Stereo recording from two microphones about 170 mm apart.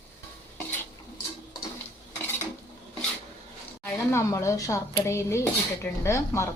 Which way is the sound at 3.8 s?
15° left (ahead or behind).